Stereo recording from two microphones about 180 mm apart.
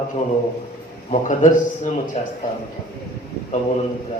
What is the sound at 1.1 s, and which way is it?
A man's voice, 45° left (ahead or behind).